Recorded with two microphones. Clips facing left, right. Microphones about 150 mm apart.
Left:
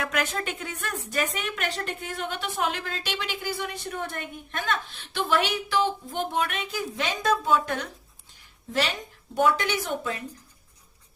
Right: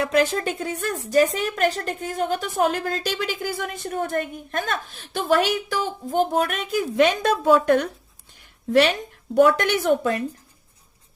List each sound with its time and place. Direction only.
0.0 s a woman's voice: 30° right (ahead or behind); by 7.9 s 55° right (ahead or behind)
9.4 s a woman's voice: 60° right (ahead or behind)